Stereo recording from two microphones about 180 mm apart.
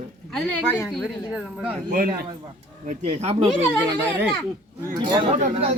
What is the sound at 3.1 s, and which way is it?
Speech, 35° right (ahead or behind).